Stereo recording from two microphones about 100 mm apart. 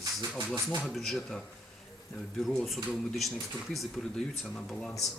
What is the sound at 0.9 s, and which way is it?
Speech, centre (ahead or behind).